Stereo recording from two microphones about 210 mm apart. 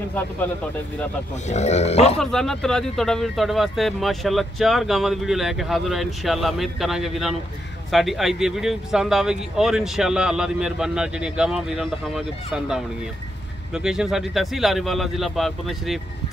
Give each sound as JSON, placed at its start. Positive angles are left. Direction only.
{"t": 1.5, "sound": "speech", "side_deg": 30}
{"t": 2.1, "sound": "speech", "side_deg": 5}